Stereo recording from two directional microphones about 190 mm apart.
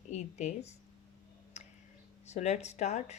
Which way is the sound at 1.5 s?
35° left (ahead or behind).